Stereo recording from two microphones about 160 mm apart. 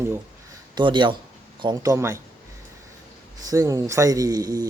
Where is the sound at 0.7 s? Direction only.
30° right (ahead or behind).